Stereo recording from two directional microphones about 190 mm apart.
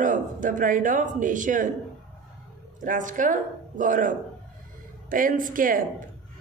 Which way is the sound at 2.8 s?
45° right (ahead or behind).